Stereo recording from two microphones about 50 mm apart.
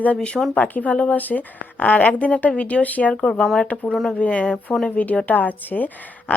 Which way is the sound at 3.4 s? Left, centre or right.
Centre.